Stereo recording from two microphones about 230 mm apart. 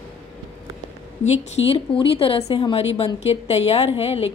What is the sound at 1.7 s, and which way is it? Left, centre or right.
A woman's voice, left.